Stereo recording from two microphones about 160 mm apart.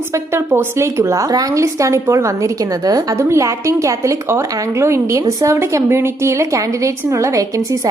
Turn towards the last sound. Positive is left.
turn(degrees=-20)  # may be behind; listen again after turning